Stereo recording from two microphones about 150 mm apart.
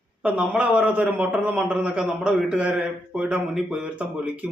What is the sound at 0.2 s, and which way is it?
A man's voice, 5° right (ahead or behind).